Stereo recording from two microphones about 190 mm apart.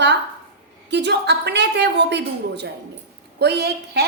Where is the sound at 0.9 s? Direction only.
65° right (ahead or behind).